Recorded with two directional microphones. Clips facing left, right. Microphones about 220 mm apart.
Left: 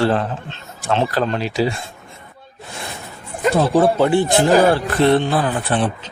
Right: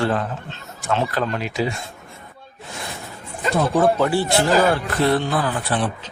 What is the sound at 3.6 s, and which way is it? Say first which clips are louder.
Speech: left 2 dB; 30° left (ahead or behind).